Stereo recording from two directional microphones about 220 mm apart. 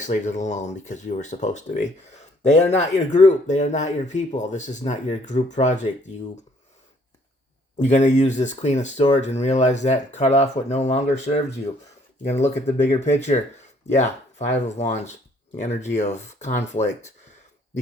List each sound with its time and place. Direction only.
0.0 s speech: 35° left (ahead or behind)
7.8 s speech: 30° left (ahead or behind)